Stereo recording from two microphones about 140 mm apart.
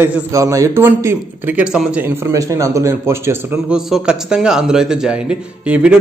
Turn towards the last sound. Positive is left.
turn(degrees=-5)  # may be behind; listen again after turning